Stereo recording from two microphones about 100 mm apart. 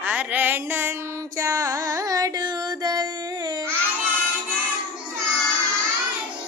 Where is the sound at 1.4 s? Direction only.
35° right (ahead or behind).